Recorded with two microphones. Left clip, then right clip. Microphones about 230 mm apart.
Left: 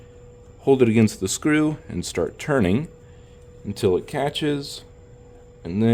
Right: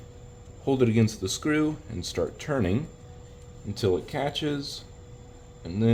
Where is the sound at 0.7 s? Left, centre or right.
Left.